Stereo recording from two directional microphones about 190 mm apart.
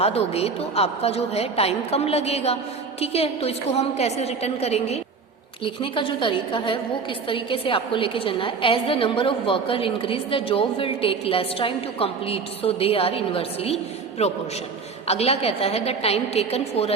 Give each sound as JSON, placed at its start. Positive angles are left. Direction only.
{"t": 0.0, "sound": "a woman's voice", "side_deg": 35}